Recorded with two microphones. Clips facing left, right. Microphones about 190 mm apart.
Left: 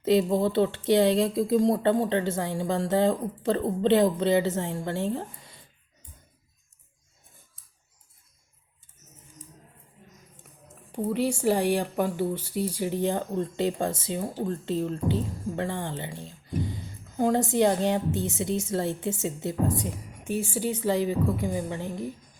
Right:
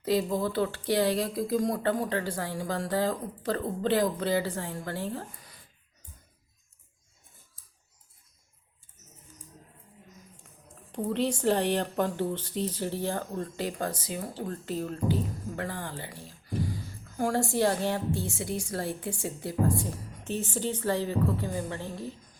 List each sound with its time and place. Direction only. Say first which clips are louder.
0.0 s speech: left 5 dB; 25° left (ahead or behind)
10.9 s speech: left 2 dB; 10° left (ahead or behind)